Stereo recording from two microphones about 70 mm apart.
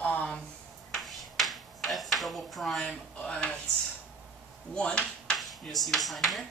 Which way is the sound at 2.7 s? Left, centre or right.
Centre.